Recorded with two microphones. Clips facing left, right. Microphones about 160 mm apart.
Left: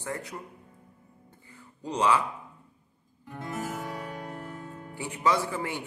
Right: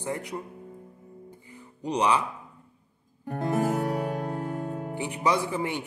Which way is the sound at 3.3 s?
50° right (ahead or behind).